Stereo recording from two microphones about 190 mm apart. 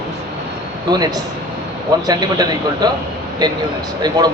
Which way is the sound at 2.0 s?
20° right (ahead or behind).